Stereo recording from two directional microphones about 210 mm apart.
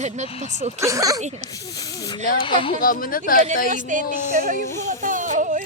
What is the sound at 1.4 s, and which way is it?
Speech, 15° left (ahead or behind).